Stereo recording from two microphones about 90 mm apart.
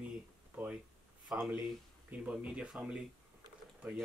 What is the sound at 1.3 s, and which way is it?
Speech, 10° right (ahead or behind).